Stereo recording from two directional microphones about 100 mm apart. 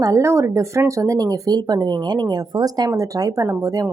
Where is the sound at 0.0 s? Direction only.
30° right (ahead or behind).